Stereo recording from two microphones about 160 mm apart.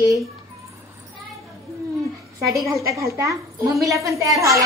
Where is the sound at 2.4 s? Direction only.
Centre (ahead or behind).